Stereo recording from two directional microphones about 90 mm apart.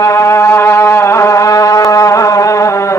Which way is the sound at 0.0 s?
35° left (ahead or behind).